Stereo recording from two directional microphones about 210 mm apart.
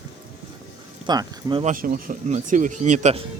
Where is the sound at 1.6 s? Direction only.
40° right (ahead or behind).